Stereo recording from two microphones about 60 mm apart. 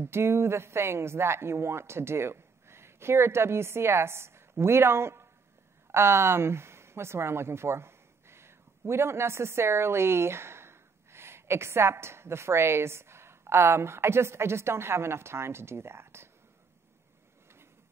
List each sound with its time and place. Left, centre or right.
0.0 s speech: right